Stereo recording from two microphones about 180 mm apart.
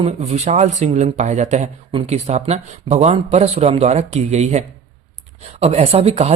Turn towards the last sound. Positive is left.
turn(degrees=-35)  # may be behind; listen again after turning